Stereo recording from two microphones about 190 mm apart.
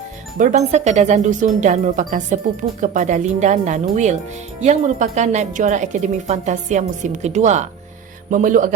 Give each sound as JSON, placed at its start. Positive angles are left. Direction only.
{"t": 0.3, "sound": "speech", "side_deg": -40}